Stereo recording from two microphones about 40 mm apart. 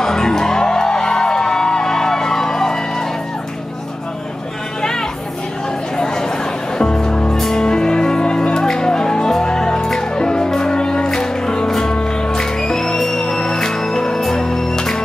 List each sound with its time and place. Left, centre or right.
0.0 s music: centre
5.9 s a sound: centre
6.8 s music: centre
7.3 s music: centre
7.6 s music: centre